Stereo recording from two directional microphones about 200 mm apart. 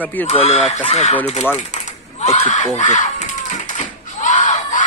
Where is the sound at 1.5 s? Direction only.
35° left (ahead or behind).